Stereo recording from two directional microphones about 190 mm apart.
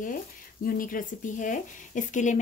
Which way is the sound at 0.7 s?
45° left (ahead or behind).